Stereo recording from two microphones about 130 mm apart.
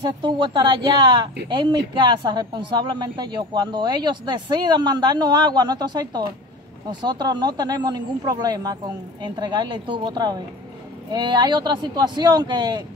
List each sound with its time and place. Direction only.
0.0 s a woman's voice: 35° right (ahead or behind)